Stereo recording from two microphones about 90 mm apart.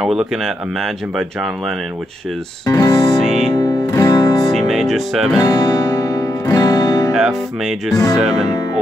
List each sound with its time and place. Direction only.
0.0 s music: 5° right (ahead or behind)
2.6 s music: 45° left (ahead or behind)
3.2 s music: centre (ahead or behind)
3.5 s music: 40° left (ahead or behind)
4.5 s music: centre (ahead or behind)
5.4 s music: 45° left (ahead or behind)
7.1 s music: 5° right (ahead or behind)